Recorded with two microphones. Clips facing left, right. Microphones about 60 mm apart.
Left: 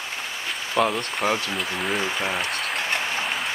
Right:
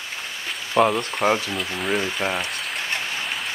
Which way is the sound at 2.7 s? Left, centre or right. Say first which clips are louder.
Left 1 dB; centre.